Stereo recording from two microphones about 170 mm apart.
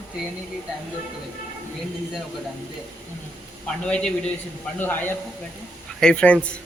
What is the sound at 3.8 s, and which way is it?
Speech, 5° left (ahead or behind).